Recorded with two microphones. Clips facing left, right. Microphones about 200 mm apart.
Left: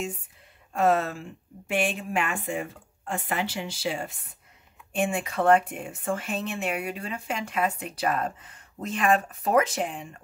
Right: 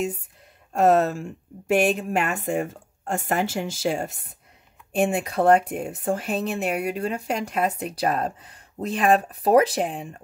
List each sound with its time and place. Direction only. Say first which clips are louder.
0.7 s speech: right 5 dB; 40° right (ahead or behind)